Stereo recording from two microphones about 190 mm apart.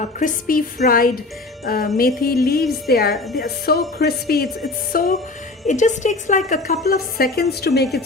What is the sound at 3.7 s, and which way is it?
A woman's voice, 55° left (ahead or behind).